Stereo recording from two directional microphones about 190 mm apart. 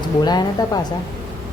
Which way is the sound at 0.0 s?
20° left (ahead or behind).